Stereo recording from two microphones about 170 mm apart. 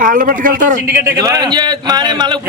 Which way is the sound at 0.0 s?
55° right (ahead or behind).